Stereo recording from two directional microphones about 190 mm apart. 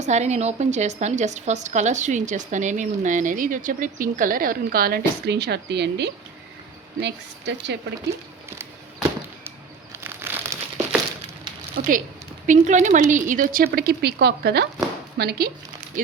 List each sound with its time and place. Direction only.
0.0 s a woman's voice: 35° right (ahead or behind); by 7.8 s 65° right (ahead or behind)
8.5 s a sound: 10° right (ahead or behind)
10.0 s crumpling: 10° right (ahead or behind)
11.8 s a woman's voice: 50° right (ahead or behind)
13.7 s speech: 55° right (ahead or behind)